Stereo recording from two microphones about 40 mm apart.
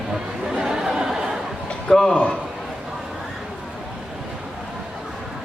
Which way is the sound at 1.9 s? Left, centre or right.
Centre.